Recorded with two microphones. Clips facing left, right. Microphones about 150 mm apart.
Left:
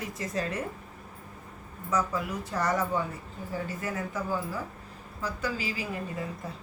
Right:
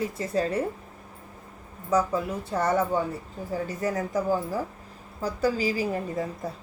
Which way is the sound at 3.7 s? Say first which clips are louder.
Right 6 dB; 40° right (ahead or behind).